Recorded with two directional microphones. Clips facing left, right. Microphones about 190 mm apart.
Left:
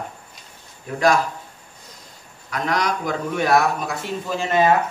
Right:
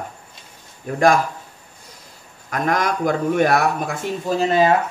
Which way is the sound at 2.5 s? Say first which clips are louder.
Right 2 dB; 50° right (ahead or behind).